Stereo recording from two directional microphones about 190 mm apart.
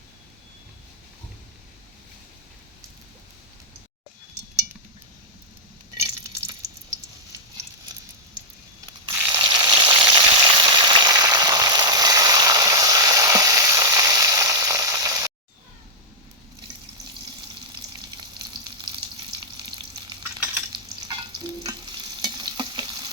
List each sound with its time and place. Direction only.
6.5 s water: 15° right (ahead or behind)
9.3 s frying: 25° right (ahead or behind)
18.3 s frying: 20° right (ahead or behind)
20.4 s stir: 10° right (ahead or behind)
22.2 s stir: 20° right (ahead or behind)